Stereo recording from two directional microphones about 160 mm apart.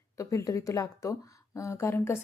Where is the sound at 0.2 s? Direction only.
20° left (ahead or behind).